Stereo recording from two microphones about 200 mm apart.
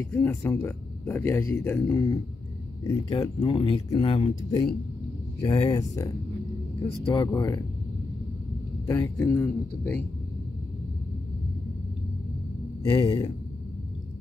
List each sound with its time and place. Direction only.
0.1 s speech: 5° left (ahead or behind)
7.1 s speech: 20° left (ahead or behind)
8.8 s speech: 15° left (ahead or behind)
12.9 s speech: 15° left (ahead or behind)